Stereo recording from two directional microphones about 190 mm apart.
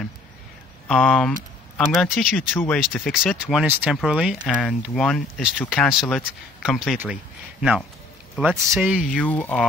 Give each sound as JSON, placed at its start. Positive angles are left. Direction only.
{"t": 0.8, "sound": "speech", "side_deg": 5}
{"t": 8.4, "sound": "speech", "side_deg": -5}
{"t": 9.1, "sound": "speech", "side_deg": 10}